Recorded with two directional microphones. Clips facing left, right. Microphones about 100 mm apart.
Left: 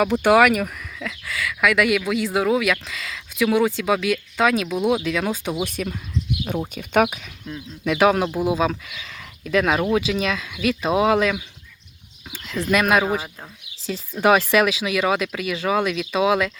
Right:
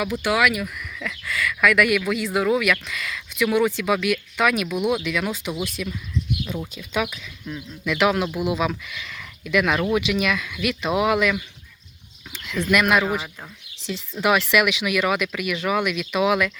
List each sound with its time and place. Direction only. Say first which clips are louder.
0.0 s speech: left 6 dB; 55° left (ahead or behind)
0.8 s speech: even; 25° left (ahead or behind)
5.6 s speech: left 2 dB; 50° left (ahead or behind)
7.9 s speech: left 3 dB; 35° left (ahead or behind)
12.7 s speech: left 1 dB; 30° left (ahead or behind)
14.2 s speech: left 3 dB; 40° left (ahead or behind)